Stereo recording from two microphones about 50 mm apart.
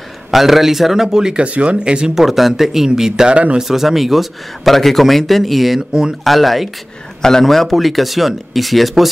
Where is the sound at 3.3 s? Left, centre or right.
Right.